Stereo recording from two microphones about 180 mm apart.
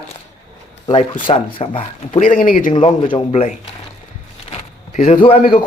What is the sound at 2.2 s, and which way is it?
Speech, 50° left (ahead or behind).